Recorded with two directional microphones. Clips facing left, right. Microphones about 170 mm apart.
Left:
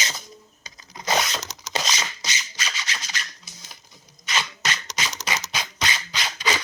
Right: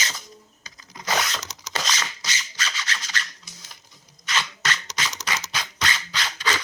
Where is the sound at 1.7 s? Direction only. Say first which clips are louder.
Left 1 dB; 15° left (ahead or behind).